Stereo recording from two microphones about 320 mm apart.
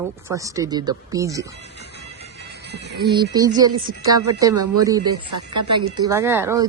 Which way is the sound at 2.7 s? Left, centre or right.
Right.